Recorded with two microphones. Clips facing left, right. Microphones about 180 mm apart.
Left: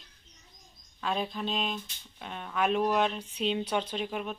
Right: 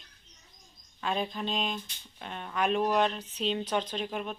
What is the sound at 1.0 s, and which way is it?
Speech, centre (ahead or behind).